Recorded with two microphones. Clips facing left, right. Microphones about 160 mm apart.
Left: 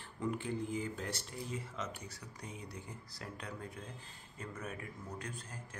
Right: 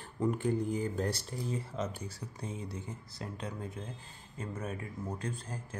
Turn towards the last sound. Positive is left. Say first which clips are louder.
# right 7 dB
turn(degrees=-30)  # may be behind; listen again after turning